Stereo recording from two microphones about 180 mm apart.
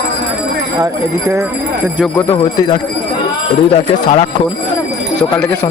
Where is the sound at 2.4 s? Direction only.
20° left (ahead or behind).